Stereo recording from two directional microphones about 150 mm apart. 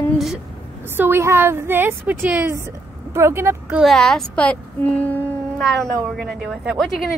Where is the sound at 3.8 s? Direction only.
5° left (ahead or behind).